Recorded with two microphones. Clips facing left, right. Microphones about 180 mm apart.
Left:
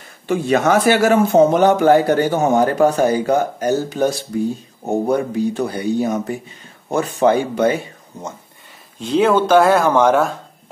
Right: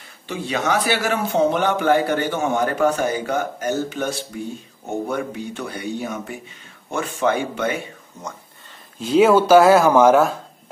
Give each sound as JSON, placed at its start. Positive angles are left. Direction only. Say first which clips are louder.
{"t": 0.3, "sound": "a man's voice", "louder": "left 7 dB", "side_deg": 50}
{"t": 9.0, "sound": "speech", "louder": "right 1 dB", "side_deg": -5}